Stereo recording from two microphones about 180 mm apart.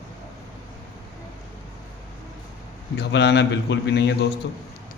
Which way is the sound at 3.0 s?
70° left (ahead or behind).